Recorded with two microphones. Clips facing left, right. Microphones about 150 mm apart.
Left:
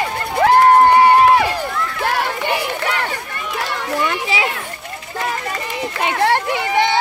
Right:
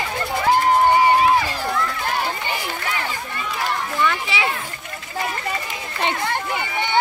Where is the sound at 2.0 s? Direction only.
70° left (ahead or behind).